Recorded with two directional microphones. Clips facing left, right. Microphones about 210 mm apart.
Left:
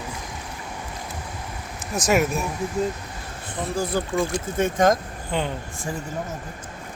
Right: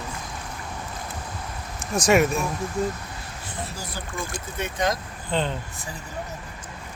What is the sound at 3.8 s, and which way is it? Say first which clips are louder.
Speech: left 10 dB; 55° left (ahead or behind).